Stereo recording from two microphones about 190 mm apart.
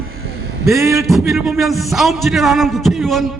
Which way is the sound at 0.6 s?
15° right (ahead or behind).